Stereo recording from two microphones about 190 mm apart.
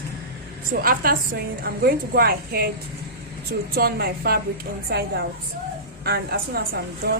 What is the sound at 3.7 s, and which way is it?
A woman's voice, 55° right (ahead or behind).